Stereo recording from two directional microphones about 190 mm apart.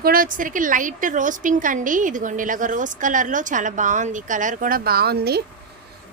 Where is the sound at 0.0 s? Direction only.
50° right (ahead or behind).